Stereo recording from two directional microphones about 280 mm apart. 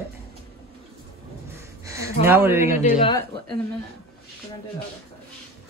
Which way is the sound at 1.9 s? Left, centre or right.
Centre.